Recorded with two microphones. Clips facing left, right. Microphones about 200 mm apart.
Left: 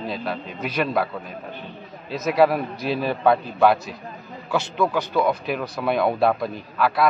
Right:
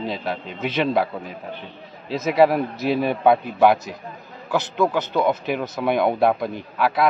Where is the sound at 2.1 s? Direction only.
25° right (ahead or behind).